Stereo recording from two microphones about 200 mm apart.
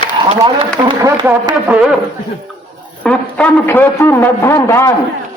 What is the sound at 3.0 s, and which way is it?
A man's voice, 10° left (ahead or behind).